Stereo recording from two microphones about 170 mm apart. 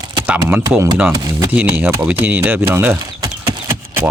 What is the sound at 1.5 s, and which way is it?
Speech, 10° right (ahead or behind).